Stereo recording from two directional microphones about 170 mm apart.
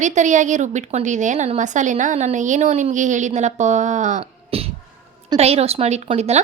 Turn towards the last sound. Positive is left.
turn(degrees=-40)  # may be behind; listen again after turning